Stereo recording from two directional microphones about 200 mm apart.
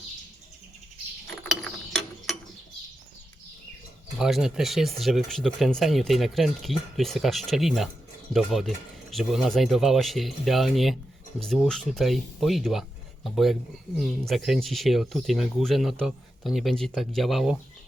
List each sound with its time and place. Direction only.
1.9 s mechanisms: centre (ahead or behind)
4.2 s speech: centre (ahead or behind)